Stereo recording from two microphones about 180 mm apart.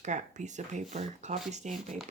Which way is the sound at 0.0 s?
40° right (ahead or behind).